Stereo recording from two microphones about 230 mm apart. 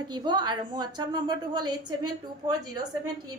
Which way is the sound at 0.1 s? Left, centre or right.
Centre.